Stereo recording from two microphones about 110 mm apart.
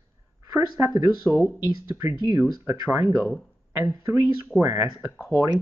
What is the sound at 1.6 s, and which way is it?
Speech, 25° right (ahead or behind).